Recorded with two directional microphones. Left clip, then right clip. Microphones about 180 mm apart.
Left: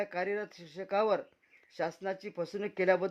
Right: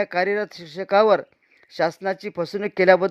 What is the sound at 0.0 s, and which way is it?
Speech, 35° right (ahead or behind).